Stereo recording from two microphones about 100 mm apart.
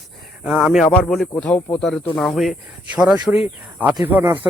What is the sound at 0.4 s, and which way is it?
A man's voice, 5° right (ahead or behind).